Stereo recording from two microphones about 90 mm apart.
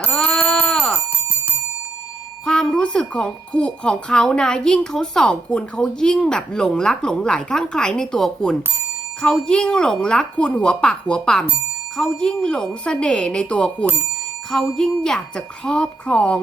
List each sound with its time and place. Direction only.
0.1 s a sound: 15° left (ahead or behind)
2.4 s speech: 5° left (ahead or behind)
15.0 s speech: 5° left (ahead or behind)